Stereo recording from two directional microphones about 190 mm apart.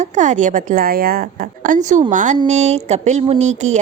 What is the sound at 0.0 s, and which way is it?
A woman's voice, 40° right (ahead or behind).